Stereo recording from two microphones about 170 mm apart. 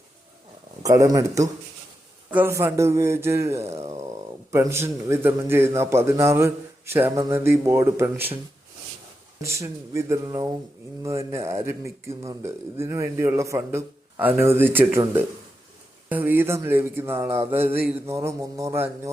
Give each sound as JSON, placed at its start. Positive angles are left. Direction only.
{"t": 0.9, "sound": "a man's voice", "side_deg": -20}
{"t": 9.4, "sound": "a man's voice", "side_deg": -15}